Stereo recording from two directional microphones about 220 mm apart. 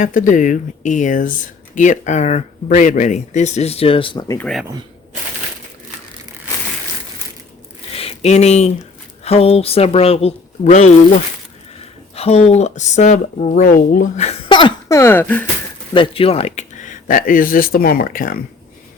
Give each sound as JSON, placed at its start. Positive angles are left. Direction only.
{"t": 0.0, "sound": "speech", "side_deg": 35}
{"t": 4.4, "sound": "speech", "side_deg": 0}
{"t": 7.9, "sound": "speech", "side_deg": 30}
{"t": 12.1, "sound": "speech", "side_deg": 30}
{"t": 15.9, "sound": "speech", "side_deg": 25}